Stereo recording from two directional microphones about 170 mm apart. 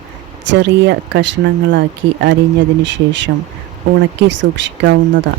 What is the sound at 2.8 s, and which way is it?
Speech, 90° right.